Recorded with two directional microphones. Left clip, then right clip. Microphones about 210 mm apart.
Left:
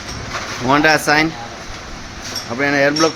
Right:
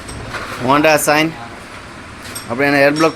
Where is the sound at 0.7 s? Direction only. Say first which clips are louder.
Right 1 dB; 5° right (ahead or behind).